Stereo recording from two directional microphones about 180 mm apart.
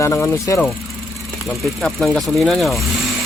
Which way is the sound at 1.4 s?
Centre (ahead or behind).